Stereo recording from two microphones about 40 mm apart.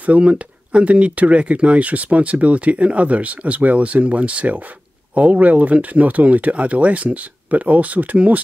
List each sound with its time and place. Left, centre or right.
0.2 s speech: right